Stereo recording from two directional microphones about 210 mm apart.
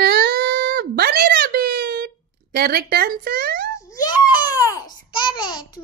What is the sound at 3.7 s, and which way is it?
Babbling, 15° left (ahead or behind).